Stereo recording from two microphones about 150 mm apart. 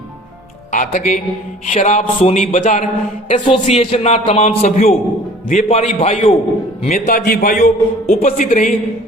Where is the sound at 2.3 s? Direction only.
55° left (ahead or behind).